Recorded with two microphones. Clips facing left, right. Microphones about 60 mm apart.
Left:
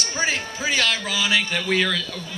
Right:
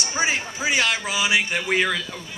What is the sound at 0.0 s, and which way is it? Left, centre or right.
A man's voice, centre.